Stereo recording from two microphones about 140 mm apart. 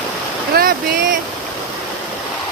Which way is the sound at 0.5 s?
90° right.